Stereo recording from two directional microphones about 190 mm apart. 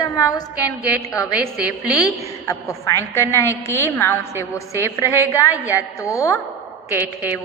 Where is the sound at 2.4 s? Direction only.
15° left (ahead or behind).